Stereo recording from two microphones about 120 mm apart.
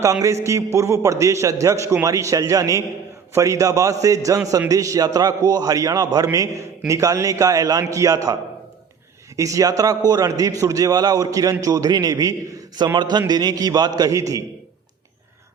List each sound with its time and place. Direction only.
0.0 s a man's voice: 25° right (ahead or behind)